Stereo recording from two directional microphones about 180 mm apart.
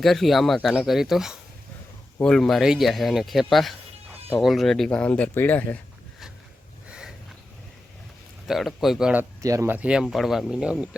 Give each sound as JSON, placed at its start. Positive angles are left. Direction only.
{"t": 0.0, "sound": "speech", "side_deg": 0}
{"t": 8.4, "sound": "speech", "side_deg": 0}
{"t": 9.4, "sound": "speech", "side_deg": -15}